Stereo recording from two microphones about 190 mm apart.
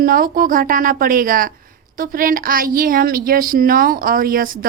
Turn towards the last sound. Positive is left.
turn(degrees=-50)  # may be behind; listen again after turning